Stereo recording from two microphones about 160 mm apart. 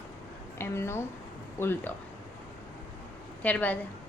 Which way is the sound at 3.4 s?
10° left (ahead or behind).